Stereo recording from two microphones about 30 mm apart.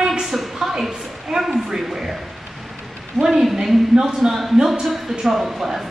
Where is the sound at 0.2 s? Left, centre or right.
Centre.